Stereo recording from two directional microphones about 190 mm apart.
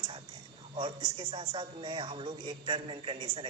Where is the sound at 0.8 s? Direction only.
25° right (ahead or behind).